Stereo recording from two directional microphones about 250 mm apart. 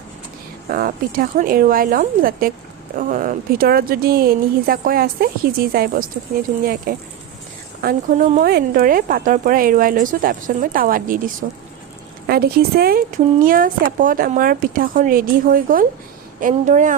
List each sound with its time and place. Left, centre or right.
0.7 s speech: right